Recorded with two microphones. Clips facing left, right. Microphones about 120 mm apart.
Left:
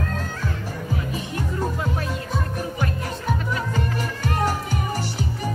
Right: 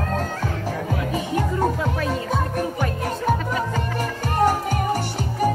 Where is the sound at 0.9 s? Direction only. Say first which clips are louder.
Right 4 dB; 85° right.